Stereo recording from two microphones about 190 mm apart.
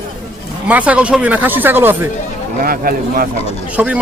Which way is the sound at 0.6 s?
5° right (ahead or behind).